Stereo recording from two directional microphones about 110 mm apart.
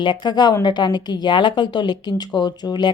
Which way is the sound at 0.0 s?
45° left (ahead or behind).